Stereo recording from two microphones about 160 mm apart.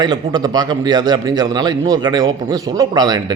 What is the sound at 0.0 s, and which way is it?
Speech, 25° right (ahead or behind).